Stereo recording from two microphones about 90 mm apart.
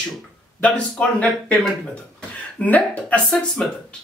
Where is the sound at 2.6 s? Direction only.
15° left (ahead or behind).